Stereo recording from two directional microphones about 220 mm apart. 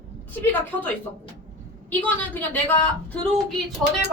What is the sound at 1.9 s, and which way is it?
Speech, 5° left (ahead or behind).